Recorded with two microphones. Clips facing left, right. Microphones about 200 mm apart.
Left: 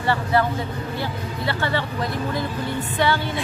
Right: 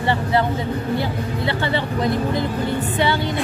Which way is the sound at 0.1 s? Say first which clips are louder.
Even; 20° right (ahead or behind).